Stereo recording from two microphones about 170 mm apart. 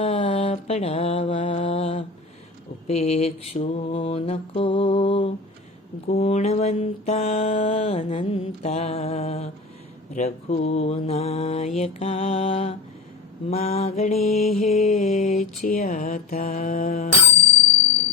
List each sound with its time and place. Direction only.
0.0 s mantra: 40° left (ahead or behind)